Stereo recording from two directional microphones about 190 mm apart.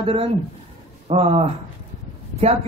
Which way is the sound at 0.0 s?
30° right (ahead or behind).